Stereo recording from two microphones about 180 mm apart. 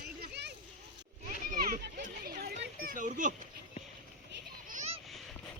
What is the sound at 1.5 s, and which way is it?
Children playing, 50° right (ahead or behind).